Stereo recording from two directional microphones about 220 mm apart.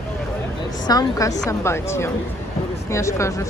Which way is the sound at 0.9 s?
15° left (ahead or behind).